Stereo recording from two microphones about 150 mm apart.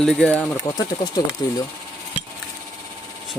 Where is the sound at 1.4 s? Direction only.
25° left (ahead or behind).